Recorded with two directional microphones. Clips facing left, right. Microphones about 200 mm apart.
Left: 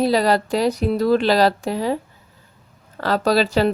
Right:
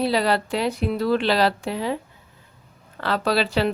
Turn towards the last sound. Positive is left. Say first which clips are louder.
# left 4 dB
turn(degrees=40)  # may be behind; listen again after turning